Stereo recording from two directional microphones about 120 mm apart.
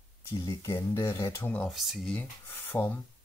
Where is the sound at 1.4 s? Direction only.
10° left (ahead or behind).